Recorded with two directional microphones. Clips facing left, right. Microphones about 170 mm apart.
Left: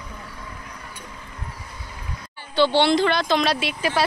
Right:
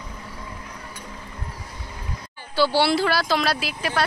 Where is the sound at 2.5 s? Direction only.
5° right (ahead or behind).